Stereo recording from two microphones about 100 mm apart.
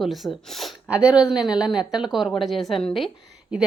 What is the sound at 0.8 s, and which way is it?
A woman's voice, 15° right (ahead or behind).